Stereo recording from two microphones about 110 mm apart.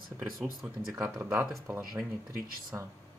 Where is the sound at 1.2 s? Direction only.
25° right (ahead or behind).